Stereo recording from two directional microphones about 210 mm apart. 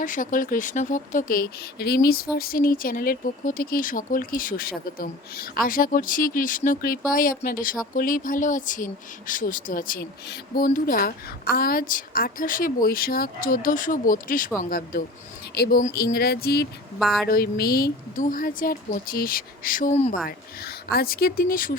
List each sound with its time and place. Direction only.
0.0 s speech: 40° left (ahead or behind)
17.0 s speech: centre (ahead or behind)
17.2 s speech: 45° left (ahead or behind)
20.2 s speech: 45° left (ahead or behind)